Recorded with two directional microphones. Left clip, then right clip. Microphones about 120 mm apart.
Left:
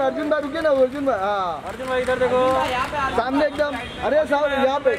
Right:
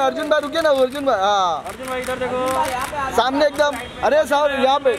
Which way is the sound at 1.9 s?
35° left (ahead or behind).